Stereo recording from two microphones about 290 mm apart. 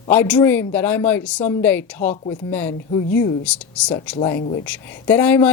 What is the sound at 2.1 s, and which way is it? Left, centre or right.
Speech, centre.